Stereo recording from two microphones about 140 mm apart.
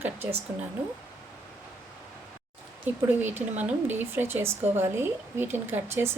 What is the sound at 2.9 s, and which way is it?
A woman's voice, 15° right (ahead or behind).